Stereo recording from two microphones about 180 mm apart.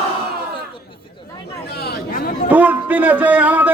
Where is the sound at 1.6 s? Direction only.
65° left (ahead or behind).